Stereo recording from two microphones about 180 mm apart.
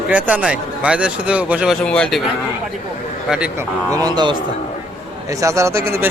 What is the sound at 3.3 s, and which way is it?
Speech, 5° right (ahead or behind).